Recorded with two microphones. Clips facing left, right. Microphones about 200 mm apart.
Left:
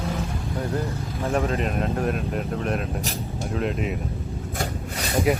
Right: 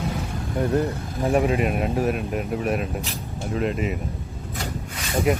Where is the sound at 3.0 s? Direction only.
40° left (ahead or behind).